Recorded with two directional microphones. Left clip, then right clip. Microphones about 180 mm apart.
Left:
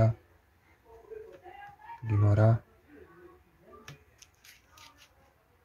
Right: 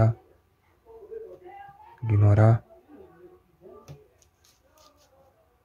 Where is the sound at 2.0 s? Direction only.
20° right (ahead or behind).